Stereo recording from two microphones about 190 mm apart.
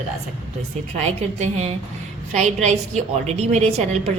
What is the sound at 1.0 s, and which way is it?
A woman's voice, 35° right (ahead or behind).